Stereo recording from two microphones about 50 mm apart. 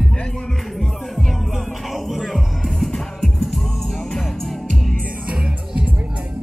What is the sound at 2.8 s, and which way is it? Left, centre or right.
Music, centre.